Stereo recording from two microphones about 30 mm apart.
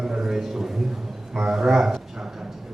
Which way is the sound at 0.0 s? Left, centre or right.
Centre.